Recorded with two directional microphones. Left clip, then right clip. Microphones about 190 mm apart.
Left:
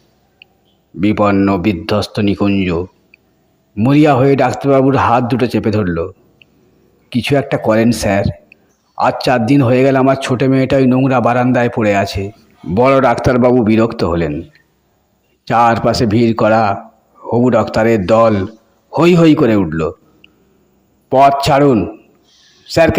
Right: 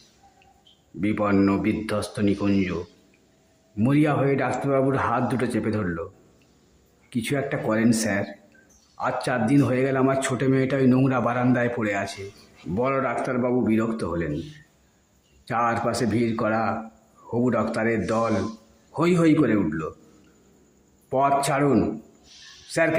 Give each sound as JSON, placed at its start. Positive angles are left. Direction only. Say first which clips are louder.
{"t": 1.0, "sound": "a man's voice", "louder": "left 10 dB", "side_deg": 35}
{"t": 3.8, "sound": "a man's voice", "louder": "left 12 dB", "side_deg": 30}
{"t": 7.1, "sound": "a man's voice", "louder": "left 12 dB", "side_deg": 30}
{"t": 15.4, "sound": "a man's voice", "louder": "left 13 dB", "side_deg": 30}
{"t": 21.4, "sound": "speech", "louder": "left 12 dB", "side_deg": 30}